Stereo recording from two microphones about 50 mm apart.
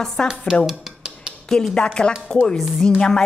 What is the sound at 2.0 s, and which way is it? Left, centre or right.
A woman's voice, centre.